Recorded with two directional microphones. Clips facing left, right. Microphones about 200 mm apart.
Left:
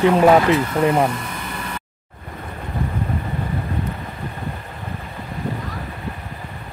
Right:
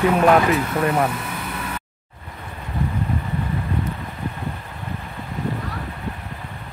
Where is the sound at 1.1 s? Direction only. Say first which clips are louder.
Even; 5° right (ahead or behind).